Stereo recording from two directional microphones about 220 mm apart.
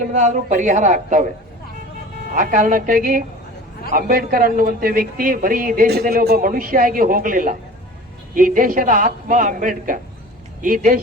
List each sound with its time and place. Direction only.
0.0 s a man's voice: 35° right (ahead or behind)
2.3 s a man's voice: 35° right (ahead or behind)